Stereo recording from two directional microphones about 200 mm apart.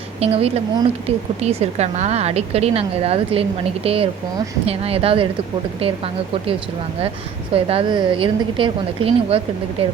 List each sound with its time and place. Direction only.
0.2 s a woman's voice: 30° right (ahead or behind)